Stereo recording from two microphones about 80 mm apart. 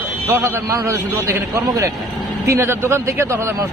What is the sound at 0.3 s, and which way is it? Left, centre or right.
A man's voice, right.